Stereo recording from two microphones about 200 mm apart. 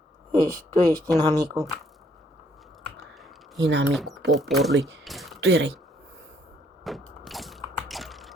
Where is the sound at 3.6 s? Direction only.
60° right (ahead or behind).